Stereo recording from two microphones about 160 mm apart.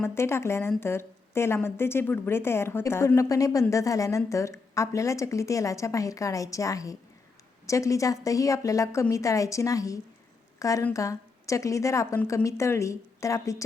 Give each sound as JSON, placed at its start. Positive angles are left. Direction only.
{"t": 0.0, "sound": "a woman's voice", "side_deg": 15}